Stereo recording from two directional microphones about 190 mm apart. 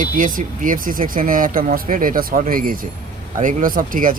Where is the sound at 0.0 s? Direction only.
45° right (ahead or behind).